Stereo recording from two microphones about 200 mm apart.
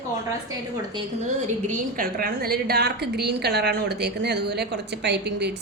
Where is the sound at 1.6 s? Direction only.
40° right (ahead or behind).